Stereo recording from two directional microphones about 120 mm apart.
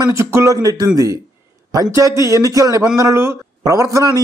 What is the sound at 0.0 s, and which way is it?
A man's voice, 25° right (ahead or behind).